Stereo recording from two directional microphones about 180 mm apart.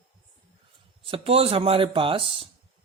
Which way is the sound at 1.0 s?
30° right (ahead or behind).